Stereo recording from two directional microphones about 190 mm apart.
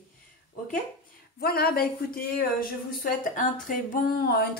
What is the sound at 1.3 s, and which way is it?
A woman's voice, 55° left (ahead or behind).